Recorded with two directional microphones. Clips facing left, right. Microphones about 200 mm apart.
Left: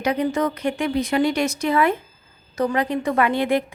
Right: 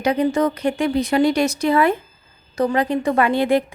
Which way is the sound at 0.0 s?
30° right (ahead or behind).